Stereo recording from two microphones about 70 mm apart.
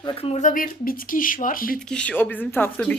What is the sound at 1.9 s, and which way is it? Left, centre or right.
A woman's voice, centre.